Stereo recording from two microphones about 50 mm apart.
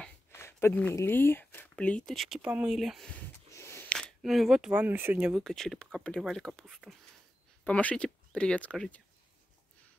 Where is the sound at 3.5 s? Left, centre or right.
Left.